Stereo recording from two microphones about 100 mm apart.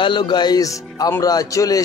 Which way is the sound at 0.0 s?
50° left (ahead or behind).